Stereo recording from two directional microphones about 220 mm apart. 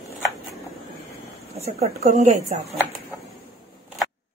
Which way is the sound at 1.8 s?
30° right (ahead or behind).